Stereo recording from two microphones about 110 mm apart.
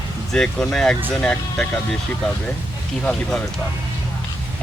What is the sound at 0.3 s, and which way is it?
Speech, 10° left (ahead or behind).